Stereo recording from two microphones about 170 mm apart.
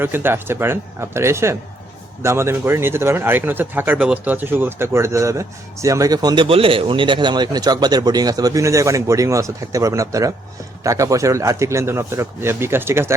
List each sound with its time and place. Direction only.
0.0 s a man's voice: 10° right (ahead or behind)